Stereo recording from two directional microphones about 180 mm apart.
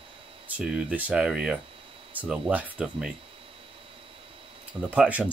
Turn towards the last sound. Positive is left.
turn(degrees=-5)  # may be behind; listen again after turning